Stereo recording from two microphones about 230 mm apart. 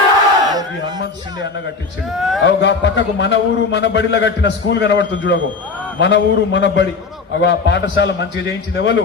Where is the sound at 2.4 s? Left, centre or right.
Left.